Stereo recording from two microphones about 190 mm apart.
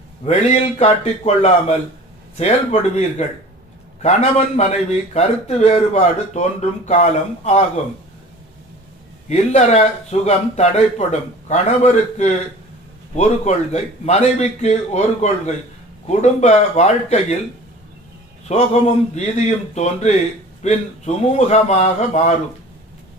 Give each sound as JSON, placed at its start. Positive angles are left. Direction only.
{"t": 0.3, "sound": "a man's voice", "side_deg": 35}
{"t": 9.3, "sound": "a man's voice", "side_deg": 35}
{"t": 18.4, "sound": "a man's voice", "side_deg": 35}